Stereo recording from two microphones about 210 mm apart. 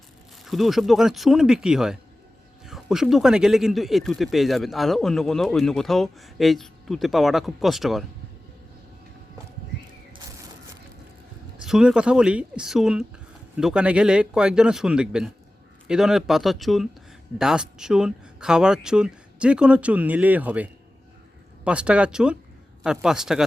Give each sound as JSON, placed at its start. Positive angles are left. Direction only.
{"t": 0.4, "sound": "speech", "side_deg": 0}
{"t": 11.6, "sound": "speech", "side_deg": -5}